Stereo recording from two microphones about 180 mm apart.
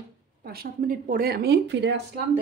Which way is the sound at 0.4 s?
55° right (ahead or behind).